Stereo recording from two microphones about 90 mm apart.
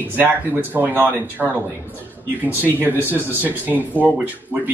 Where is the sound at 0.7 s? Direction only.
20° right (ahead or behind).